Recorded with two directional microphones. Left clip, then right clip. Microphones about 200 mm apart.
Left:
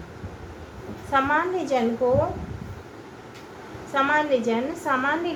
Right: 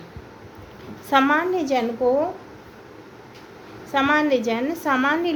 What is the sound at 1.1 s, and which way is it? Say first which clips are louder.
Speech: right 3 dB; 45° right (ahead or behind).